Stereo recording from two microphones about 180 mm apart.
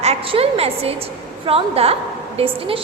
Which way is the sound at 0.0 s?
35° right (ahead or behind).